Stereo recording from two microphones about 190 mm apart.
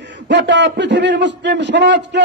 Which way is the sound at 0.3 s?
70° right (ahead or behind).